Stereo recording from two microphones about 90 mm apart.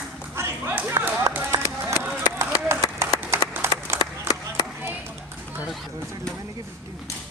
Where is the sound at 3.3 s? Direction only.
30° right (ahead or behind).